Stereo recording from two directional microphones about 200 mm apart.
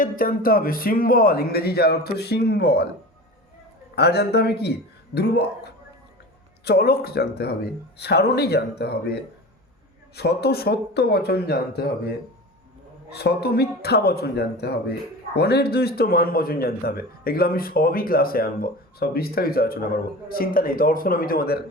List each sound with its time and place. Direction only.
0.0 s a man's voice: 45° left (ahead or behind)
3.9 s a man's voice: 55° left (ahead or behind)
10.2 s a man's voice: 55° left (ahead or behind)